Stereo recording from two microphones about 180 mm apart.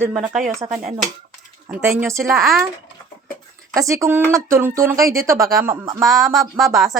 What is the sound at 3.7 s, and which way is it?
Speech, 15° right (ahead or behind).